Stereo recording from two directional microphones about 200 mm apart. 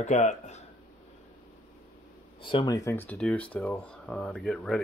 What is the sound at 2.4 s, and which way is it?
Speech, 20° left (ahead or behind).